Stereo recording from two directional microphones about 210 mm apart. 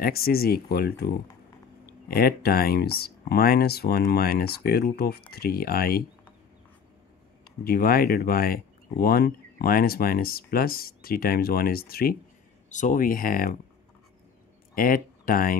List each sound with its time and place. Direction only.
0.0 s speech: 45° left (ahead or behind)
7.6 s speech: 45° left (ahead or behind)
12.6 s speech: 35° left (ahead or behind)
14.8 s speech: 40° left (ahead or behind)